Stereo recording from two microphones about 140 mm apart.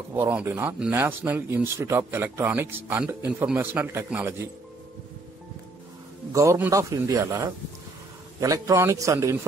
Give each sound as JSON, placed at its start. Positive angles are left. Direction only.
{"t": 0.1, "sound": "speech", "side_deg": -15}
{"t": 6.3, "sound": "a man's voice", "side_deg": -20}